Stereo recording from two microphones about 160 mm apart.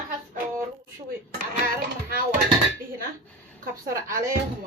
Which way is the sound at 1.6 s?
65° right (ahead or behind).